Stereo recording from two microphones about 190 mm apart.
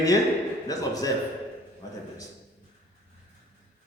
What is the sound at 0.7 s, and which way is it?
Speech, 20° left (ahead or behind).